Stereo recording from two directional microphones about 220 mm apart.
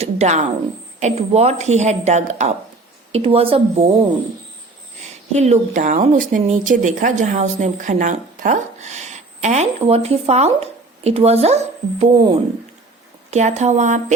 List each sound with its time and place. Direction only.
0.0 s speech: 30° right (ahead or behind)
5.3 s speech: 30° right (ahead or behind)
13.3 s speech: 30° right (ahead or behind)